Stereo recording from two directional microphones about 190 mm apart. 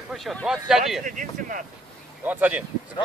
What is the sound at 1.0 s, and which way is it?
Speech, 45° right (ahead or behind).